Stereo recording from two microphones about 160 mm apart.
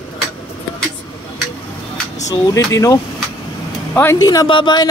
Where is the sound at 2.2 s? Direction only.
20° left (ahead or behind).